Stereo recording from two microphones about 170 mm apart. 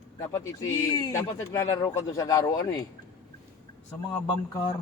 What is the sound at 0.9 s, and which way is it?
A man's voice, 20° left (ahead or behind).